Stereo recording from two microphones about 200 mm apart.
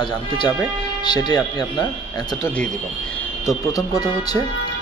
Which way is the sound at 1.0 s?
20° left (ahead or behind).